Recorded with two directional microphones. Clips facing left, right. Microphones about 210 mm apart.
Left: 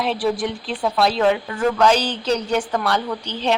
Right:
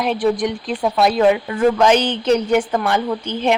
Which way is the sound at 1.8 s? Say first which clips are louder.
Right 3 dB; 20° right (ahead or behind).